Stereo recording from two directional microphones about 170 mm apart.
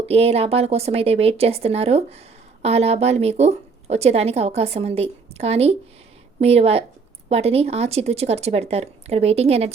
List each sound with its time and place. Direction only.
0.0 s speech: 35° right (ahead or behind)